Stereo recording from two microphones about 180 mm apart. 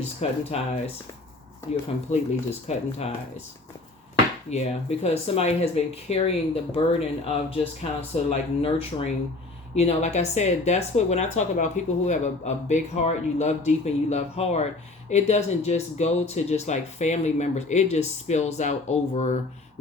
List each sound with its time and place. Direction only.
0.2 s speech: 35° left (ahead or behind)
1.7 s speech: 35° left (ahead or behind)
4.5 s speech: 35° left (ahead or behind)